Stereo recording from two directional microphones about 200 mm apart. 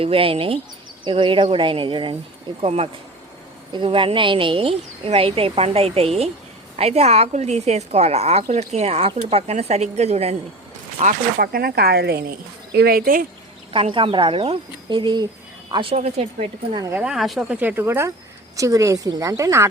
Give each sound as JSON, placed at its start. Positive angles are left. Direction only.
{"t": 0.0, "sound": "a woman's voice", "side_deg": -25}
{"t": 11.0, "sound": "speech", "side_deg": -50}
{"t": 13.7, "sound": "a woman's voice", "side_deg": -25}
{"t": 16.7, "sound": "speech", "side_deg": -15}
{"t": 17.0, "sound": "speech", "side_deg": 0}